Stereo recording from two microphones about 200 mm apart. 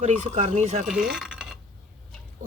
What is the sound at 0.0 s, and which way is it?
Speech, 35° right (ahead or behind).